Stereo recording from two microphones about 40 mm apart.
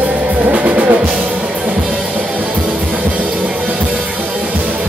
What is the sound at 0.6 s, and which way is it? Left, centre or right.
Music, right.